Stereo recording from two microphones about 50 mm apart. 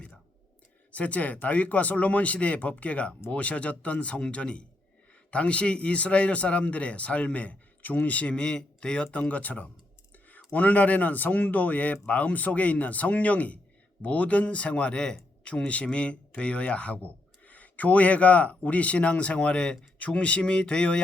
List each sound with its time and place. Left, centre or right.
0.9 s a man's voice: left